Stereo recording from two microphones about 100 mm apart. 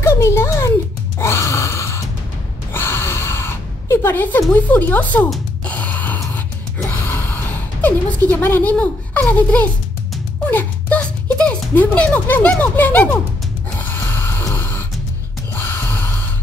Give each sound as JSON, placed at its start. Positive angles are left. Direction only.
{"t": 0.0, "sound": "a sound", "side_deg": 30}
{"t": 1.2, "sound": "gasp", "side_deg": 30}
{"t": 2.7, "sound": "a sound", "side_deg": 25}
{"t": 5.7, "sound": "music", "side_deg": 15}
{"t": 6.9, "sound": "gasp", "side_deg": 20}
{"t": 8.3, "sound": "a child's voice", "side_deg": 20}
{"t": 13.7, "sound": "snoring", "side_deg": 20}
{"t": 15.5, "sound": "gasp", "side_deg": 20}